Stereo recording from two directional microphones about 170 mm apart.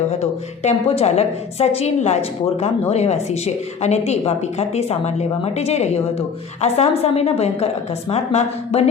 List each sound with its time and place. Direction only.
0.2 s a woman's voice: 40° left (ahead or behind)